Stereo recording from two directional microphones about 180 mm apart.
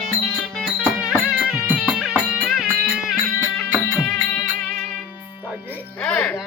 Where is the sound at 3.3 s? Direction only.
15° left (ahead or behind).